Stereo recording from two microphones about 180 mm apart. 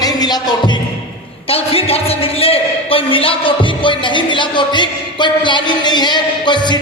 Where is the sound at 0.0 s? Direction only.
20° left (ahead or behind).